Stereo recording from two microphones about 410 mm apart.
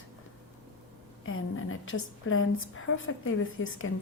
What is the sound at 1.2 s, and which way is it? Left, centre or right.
A woman's voice, left.